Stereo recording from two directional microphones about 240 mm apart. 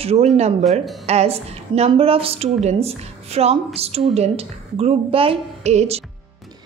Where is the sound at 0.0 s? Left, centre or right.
Right.